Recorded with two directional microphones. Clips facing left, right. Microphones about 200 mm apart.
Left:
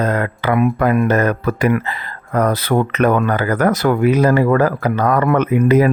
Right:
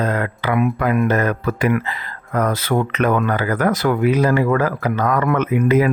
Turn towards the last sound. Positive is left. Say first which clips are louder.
# left 3 dB
turn(degrees=40)  # may be behind; listen again after turning